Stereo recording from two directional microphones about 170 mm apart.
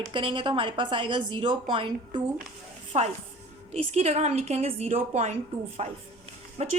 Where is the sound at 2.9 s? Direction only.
40° right (ahead or behind).